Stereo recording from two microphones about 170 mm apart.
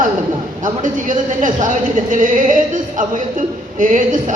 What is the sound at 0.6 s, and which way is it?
Speech, 50° right (ahead or behind).